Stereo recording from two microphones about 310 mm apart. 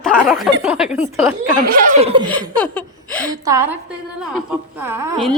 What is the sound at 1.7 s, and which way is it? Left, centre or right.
Speech, centre.